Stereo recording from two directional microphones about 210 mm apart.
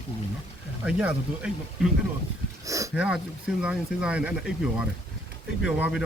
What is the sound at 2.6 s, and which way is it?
Speech, 15° right (ahead or behind).